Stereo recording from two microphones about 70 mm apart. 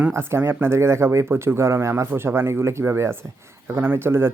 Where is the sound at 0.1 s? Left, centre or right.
Right.